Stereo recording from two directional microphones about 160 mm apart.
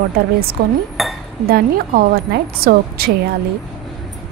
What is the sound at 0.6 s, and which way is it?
Cutlery, 90° right.